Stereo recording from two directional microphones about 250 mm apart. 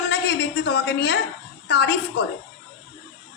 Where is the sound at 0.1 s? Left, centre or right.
Left.